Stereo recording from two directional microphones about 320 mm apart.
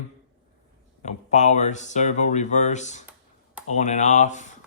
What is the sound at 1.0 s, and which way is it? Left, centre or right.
Speech, left.